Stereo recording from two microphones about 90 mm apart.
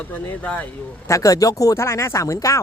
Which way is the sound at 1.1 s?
35° left (ahead or behind).